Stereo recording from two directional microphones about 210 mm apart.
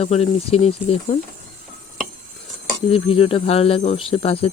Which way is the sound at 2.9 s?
25° left (ahead or behind).